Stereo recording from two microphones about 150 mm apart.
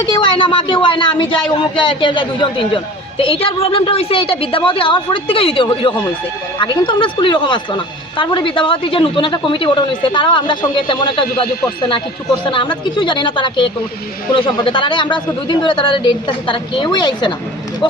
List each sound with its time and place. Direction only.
0.1 s speech: 35° left (ahead or behind)